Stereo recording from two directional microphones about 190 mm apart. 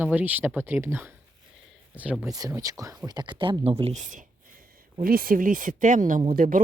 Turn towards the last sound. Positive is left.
turn(degrees=-45)  # may be behind; listen again after turning